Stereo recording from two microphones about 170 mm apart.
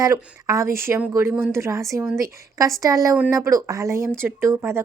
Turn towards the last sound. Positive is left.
turn(degrees=-15)  # may be behind; listen again after turning